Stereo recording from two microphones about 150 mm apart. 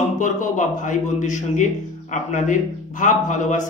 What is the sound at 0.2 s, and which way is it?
A man's voice, 55° left (ahead or behind).